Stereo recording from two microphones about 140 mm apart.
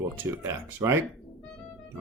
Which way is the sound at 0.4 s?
20° right (ahead or behind).